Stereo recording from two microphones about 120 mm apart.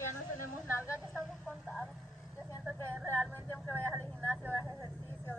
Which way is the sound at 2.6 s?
15° left (ahead or behind).